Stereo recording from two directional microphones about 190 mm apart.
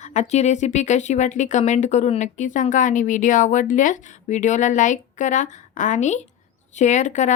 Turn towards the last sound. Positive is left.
turn(degrees=40)  # may be behind; listen again after turning